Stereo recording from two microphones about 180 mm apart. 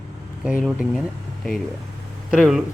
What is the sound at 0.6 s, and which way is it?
Speech, 5° right (ahead or behind).